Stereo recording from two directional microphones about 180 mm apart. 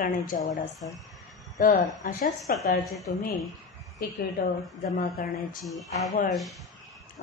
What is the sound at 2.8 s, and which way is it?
Speech, centre (ahead or behind).